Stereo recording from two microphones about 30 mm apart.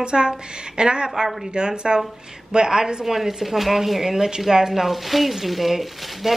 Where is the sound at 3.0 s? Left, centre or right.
Centre.